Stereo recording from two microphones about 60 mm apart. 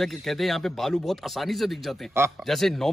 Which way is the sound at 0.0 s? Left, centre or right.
Centre.